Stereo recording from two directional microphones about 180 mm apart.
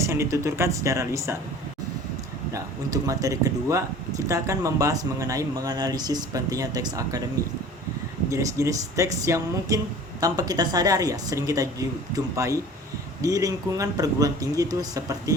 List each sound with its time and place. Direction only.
0.0 s speech: 15° right (ahead or behind)
2.5 s speech: 20° right (ahead or behind)
8.3 s speech: 20° right (ahead or behind)